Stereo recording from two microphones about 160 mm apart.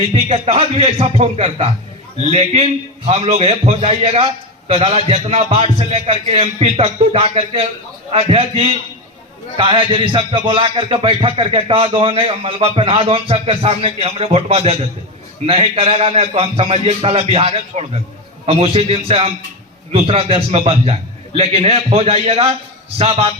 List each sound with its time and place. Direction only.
0.1 s a man's voice: 35° right (ahead or behind)